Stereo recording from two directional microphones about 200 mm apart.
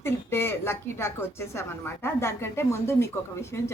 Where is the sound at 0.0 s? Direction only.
10° left (ahead or behind).